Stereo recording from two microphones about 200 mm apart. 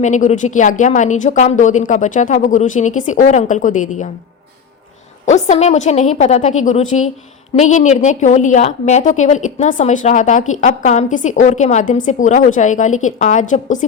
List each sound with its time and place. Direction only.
0.0 s speech: 35° left (ahead or behind)
5.3 s speech: 35° left (ahead or behind)